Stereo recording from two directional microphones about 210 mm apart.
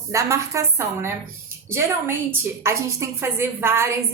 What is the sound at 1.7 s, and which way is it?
A woman's voice, 10° right (ahead or behind).